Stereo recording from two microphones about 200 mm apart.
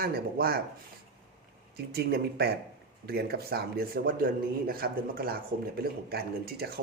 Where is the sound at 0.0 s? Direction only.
50° right (ahead or behind).